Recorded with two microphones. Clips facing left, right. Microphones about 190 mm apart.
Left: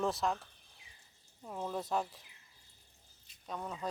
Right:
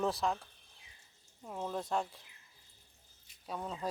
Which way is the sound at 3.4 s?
10° right (ahead or behind).